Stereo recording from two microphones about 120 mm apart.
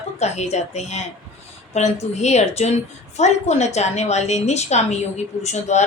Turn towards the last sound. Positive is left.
turn(degrees=70)  # may be behind; listen again after turning